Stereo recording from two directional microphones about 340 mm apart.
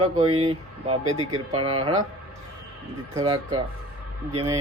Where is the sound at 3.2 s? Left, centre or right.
Centre.